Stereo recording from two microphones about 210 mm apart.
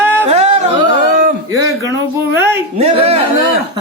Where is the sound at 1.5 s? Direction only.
15° right (ahead or behind).